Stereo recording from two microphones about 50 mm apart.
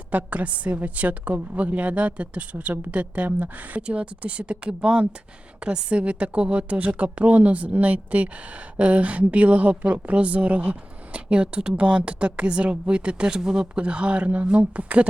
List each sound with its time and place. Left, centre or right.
0.1 s a woman's voice: right